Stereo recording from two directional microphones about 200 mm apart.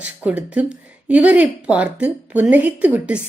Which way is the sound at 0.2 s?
5° right (ahead or behind).